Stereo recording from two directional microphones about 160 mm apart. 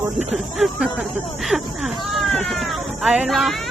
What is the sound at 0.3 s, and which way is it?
Speech, centre (ahead or behind).